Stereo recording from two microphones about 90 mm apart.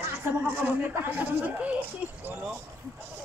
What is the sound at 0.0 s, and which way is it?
Speech, 25° right (ahead or behind).